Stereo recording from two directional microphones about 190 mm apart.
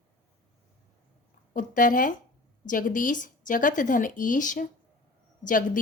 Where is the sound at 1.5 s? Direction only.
45° left (ahead or behind).